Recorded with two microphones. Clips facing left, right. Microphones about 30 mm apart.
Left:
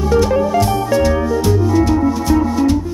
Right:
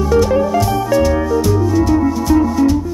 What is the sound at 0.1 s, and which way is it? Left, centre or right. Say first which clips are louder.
Music: even; centre.